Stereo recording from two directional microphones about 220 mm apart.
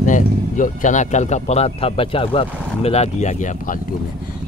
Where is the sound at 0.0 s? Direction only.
35° left (ahead or behind).